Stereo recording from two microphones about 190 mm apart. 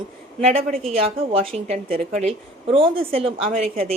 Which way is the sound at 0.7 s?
35° right (ahead or behind).